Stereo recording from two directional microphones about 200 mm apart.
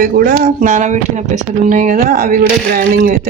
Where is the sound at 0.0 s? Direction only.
50° right (ahead or behind).